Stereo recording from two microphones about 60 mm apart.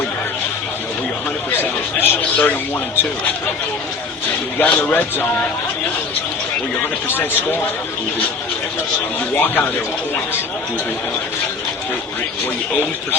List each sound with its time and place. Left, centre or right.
1.5 s a sound: left
4.5 s speech: left
7.1 s speech: left
9.3 s speech: left